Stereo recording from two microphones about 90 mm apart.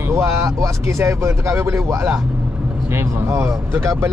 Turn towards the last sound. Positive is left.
turn(degrees=-30)  # may be behind; listen again after turning